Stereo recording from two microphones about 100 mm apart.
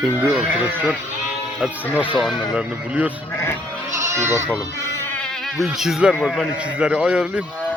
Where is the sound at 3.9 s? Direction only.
30° right (ahead or behind).